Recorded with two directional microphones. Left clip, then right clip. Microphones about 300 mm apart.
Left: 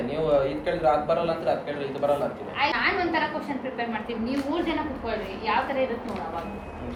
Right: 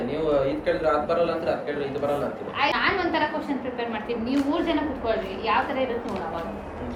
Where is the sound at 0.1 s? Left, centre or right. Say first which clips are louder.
Left 1 dB; centre.